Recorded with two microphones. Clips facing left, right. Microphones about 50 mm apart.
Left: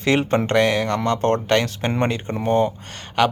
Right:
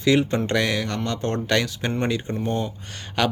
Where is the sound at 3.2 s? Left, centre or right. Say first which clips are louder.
Left 4 dB; left.